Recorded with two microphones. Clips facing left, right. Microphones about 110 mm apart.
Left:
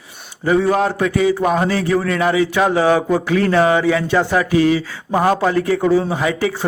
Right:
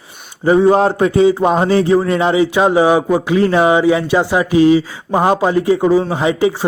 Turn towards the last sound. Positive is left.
turn(degrees=-20)  # may be behind; listen again after turning